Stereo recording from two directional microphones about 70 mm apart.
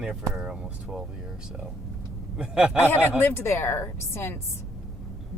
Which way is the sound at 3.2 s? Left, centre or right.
Left.